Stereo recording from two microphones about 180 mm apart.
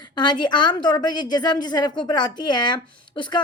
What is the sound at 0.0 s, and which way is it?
A woman's voice, 25° left (ahead or behind).